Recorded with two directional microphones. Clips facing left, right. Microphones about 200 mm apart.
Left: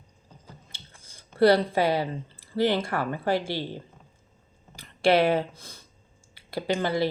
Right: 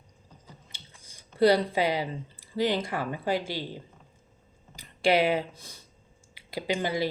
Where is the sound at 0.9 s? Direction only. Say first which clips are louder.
Left 1 dB; 15° right (ahead or behind).